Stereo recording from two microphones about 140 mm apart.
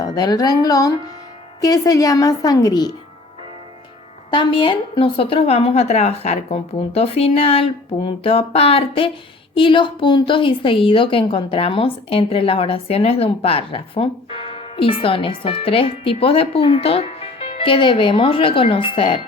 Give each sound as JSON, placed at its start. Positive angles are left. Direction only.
{"t": 0.0, "sound": "a woman's voice", "side_deg": 30}
{"t": 4.3, "sound": "a woman's voice", "side_deg": 35}